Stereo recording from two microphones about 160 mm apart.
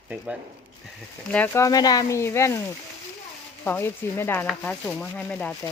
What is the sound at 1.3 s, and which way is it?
Speech, 10° left (ahead or behind).